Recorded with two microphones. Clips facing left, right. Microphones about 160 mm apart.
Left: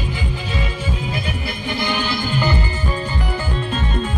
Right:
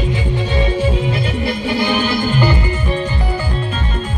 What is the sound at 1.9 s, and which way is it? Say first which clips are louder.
Music: right 5 dB; 50° right (ahead or behind).